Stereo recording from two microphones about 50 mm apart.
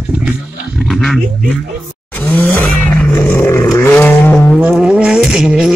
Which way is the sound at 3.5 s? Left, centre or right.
Left.